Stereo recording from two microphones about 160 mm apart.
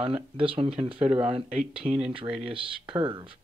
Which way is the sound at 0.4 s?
35° right (ahead or behind).